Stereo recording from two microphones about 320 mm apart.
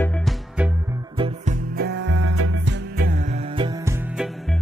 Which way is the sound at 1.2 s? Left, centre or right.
Right.